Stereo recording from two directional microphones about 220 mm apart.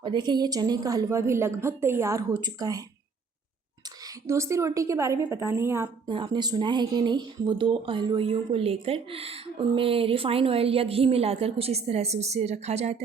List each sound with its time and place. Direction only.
0.0 s a woman's voice: 20° right (ahead or behind)
4.0 s a woman's voice: 15° right (ahead or behind); by 13.0 s 30° right (ahead or behind)